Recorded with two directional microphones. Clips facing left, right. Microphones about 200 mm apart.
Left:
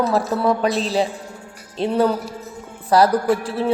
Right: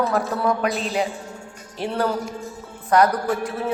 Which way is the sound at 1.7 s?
20° left (ahead or behind).